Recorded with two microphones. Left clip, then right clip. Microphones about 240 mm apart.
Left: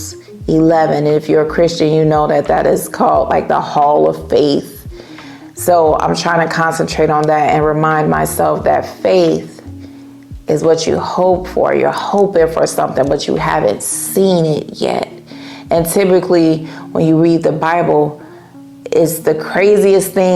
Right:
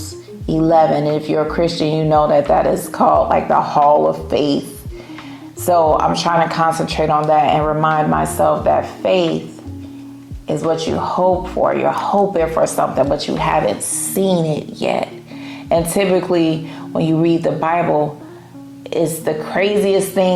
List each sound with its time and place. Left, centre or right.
0.4 s speech: left
5.6 s speech: left
10.4 s speech: left